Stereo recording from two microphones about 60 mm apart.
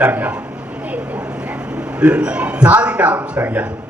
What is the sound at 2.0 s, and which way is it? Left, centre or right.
A man's voice, right.